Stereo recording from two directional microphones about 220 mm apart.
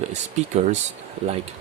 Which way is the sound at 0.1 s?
30° right (ahead or behind).